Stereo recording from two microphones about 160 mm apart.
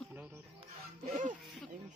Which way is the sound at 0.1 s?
10° right (ahead or behind).